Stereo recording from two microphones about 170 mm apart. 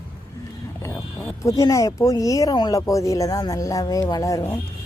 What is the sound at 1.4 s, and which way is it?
Speech, 20° left (ahead or behind).